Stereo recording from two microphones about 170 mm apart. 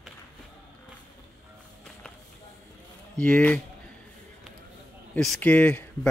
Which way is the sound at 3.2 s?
5° left (ahead or behind).